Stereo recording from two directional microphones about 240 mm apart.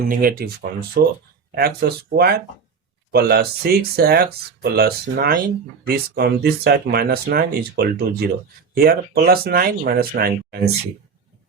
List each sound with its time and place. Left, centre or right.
0.1 s speech: right